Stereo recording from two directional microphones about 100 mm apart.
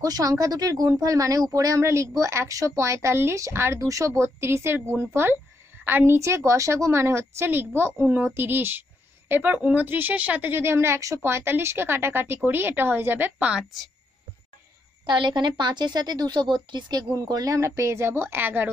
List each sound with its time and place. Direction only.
0.0 s a woman's voice: 40° right (ahead or behind); by 13.7 s 10° right (ahead or behind)
15.0 s a woman's voice: 50° right (ahead or behind); by 18.7 s 20° right (ahead or behind)